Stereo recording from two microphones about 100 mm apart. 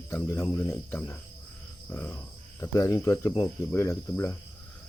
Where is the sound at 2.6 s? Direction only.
30° left (ahead or behind).